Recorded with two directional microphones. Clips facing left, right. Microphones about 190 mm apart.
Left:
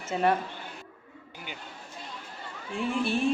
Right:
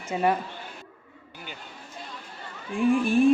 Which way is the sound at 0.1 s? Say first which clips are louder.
Right 1 dB; 10° right (ahead or behind).